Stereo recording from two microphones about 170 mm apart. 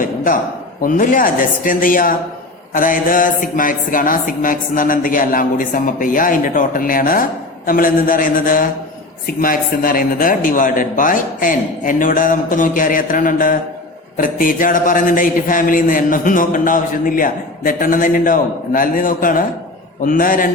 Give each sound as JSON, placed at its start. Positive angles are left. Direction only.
{"t": 0.8, "sound": "a man's voice", "side_deg": 50}
{"t": 7.7, "sound": "mantra", "side_deg": 55}
{"t": 9.2, "sound": "a man's voice", "side_deg": 55}